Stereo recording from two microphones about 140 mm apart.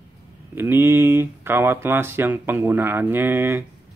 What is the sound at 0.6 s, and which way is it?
Speech, 15° right (ahead or behind).